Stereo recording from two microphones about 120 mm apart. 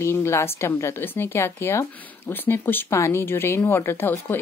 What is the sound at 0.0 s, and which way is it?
A woman's voice, 20° left (ahead or behind).